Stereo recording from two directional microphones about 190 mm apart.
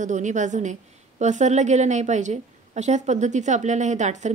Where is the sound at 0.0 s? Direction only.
40° right (ahead or behind).